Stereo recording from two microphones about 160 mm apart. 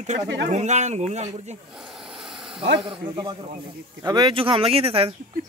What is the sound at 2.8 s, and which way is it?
A man's voice, 30° right (ahead or behind).